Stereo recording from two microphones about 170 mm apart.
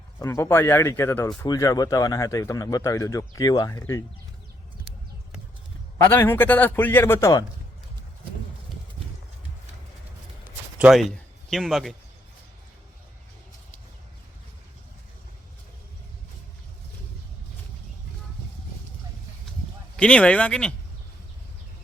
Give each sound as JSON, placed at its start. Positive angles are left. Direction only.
{"t": 0.2, "sound": "speech", "side_deg": 20}
{"t": 6.1, "sound": "speech", "side_deg": 10}
{"t": 10.8, "sound": "speech", "side_deg": -5}
{"t": 20.0, "sound": "speech", "side_deg": 5}